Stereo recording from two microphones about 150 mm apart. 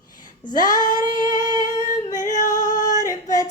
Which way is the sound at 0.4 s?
25° left (ahead or behind).